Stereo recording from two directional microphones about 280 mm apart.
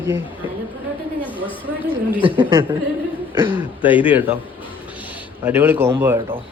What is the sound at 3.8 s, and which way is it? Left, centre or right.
Speech, centre.